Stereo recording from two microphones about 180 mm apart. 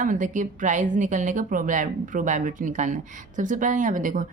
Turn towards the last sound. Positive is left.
turn(degrees=-45)  # may be behind; listen again after turning